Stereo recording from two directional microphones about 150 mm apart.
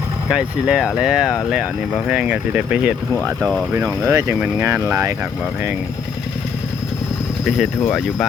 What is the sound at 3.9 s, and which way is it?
Speech, 20° right (ahead or behind).